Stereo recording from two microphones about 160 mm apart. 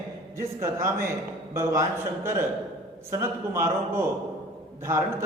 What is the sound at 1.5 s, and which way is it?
A man's voice, 20° right (ahead or behind).